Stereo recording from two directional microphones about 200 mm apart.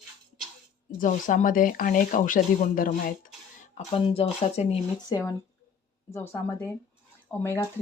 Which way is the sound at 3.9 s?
30° left (ahead or behind).